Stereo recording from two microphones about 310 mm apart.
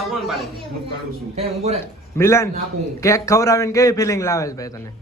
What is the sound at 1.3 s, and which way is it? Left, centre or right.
Speech, centre.